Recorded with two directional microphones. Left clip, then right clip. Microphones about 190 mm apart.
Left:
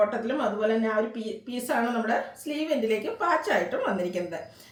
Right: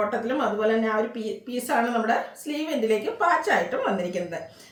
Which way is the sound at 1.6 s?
15° right (ahead or behind).